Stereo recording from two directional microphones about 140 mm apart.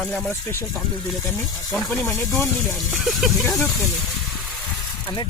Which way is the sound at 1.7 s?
20° left (ahead or behind).